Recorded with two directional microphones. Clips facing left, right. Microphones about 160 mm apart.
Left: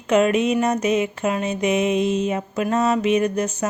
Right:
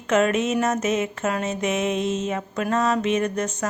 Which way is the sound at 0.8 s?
Centre (ahead or behind).